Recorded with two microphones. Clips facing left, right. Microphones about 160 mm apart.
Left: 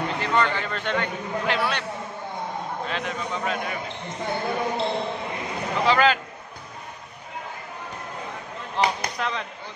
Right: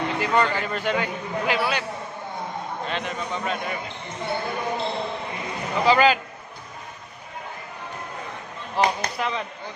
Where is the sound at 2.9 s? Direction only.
Centre (ahead or behind).